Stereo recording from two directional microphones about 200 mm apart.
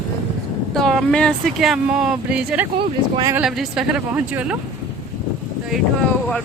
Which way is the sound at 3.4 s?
Centre (ahead or behind).